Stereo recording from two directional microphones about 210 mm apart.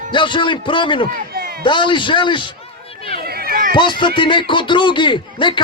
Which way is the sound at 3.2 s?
45° right (ahead or behind).